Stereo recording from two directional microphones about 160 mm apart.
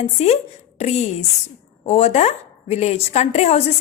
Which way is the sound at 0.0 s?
45° left (ahead or behind).